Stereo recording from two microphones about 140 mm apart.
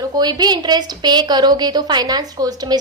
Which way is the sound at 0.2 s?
30° right (ahead or behind).